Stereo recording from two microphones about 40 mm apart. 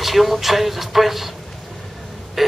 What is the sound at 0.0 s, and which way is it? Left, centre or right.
Speech, centre.